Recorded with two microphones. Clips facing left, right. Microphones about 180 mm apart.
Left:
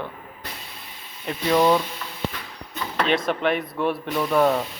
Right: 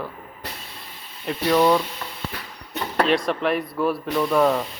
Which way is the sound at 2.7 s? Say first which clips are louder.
Right 3 dB; 35° right (ahead or behind).